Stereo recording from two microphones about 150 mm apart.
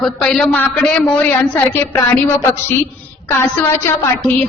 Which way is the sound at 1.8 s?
15° left (ahead or behind).